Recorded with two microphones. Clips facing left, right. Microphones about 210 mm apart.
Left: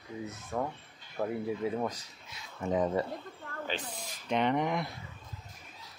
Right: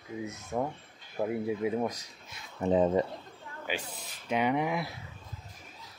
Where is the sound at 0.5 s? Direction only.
15° right (ahead or behind).